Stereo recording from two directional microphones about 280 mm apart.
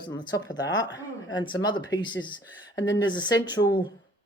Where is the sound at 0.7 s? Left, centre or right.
Left.